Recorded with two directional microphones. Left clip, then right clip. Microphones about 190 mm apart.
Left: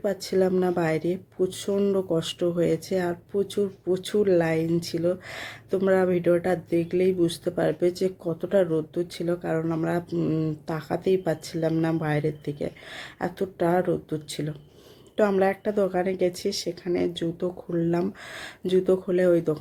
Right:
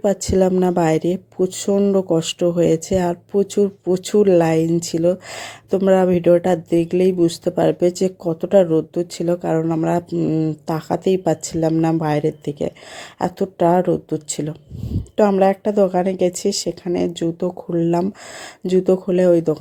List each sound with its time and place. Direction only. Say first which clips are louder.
0.0 s speech: right 7 dB; 40° right (ahead or behind)